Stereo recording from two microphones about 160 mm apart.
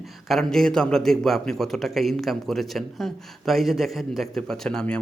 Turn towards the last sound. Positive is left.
turn(degrees=5)  # may be behind; listen again after turning